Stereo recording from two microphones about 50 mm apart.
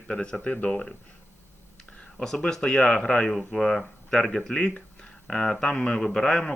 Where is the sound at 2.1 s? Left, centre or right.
Centre.